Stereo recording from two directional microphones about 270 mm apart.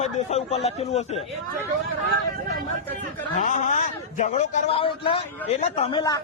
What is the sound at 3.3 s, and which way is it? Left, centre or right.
A man's voice, left.